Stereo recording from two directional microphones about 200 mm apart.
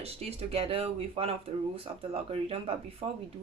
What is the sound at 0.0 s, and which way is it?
Speech, 30° right (ahead or behind).